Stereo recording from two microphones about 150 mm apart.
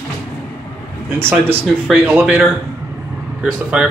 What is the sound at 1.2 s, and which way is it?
Speech, 15° right (ahead or behind).